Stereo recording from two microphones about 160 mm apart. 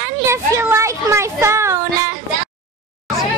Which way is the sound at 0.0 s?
15° right (ahead or behind).